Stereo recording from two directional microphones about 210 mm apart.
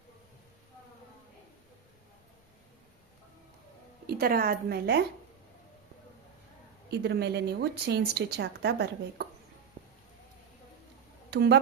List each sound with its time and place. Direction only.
4.0 s speech: 45° right (ahead or behind)
7.0 s speech: 55° right (ahead or behind)
9.8 s a sound: 30° right (ahead or behind)
11.3 s speech: 55° right (ahead or behind)